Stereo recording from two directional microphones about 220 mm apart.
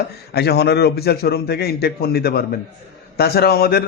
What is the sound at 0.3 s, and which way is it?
Speech, 45° left (ahead or behind).